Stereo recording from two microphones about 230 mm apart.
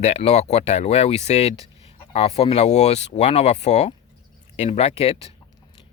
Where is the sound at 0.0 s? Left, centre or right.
Left.